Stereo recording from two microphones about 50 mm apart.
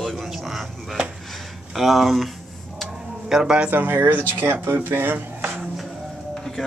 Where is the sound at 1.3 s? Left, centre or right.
Centre.